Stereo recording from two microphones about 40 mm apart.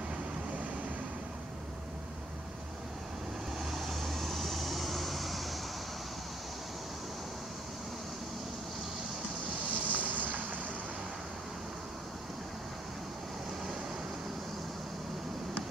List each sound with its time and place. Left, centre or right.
3.7 s vehicle: centre
9.7 s vehicle: right